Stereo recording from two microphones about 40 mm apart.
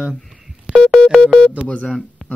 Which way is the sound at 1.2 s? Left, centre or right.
Centre.